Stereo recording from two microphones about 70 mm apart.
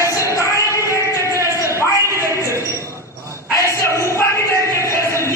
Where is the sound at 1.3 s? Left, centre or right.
Right.